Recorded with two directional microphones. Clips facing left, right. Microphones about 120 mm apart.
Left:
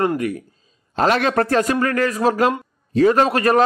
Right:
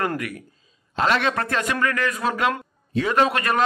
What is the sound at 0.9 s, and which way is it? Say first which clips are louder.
A man's voice: left 5 dB; 40° left (ahead or behind).